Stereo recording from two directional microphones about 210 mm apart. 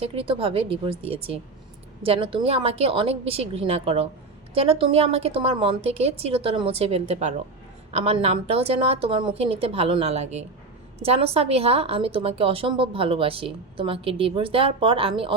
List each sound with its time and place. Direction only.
0.0 s a woman's voice: 25° right (ahead or behind)